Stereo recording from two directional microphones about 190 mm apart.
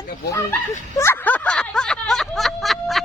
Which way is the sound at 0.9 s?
15° left (ahead or behind).